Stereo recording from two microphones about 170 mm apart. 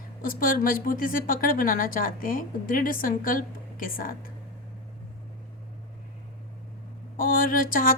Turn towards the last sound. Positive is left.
turn(degrees=55)  # may be behind; listen again after turning